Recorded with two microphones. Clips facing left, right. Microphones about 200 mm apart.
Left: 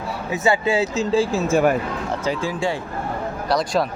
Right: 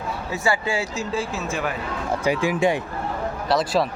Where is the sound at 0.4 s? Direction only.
20° left (ahead or behind).